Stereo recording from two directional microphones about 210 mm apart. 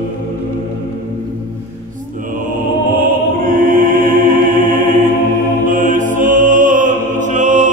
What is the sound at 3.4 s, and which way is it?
Choir, 40° right (ahead or behind).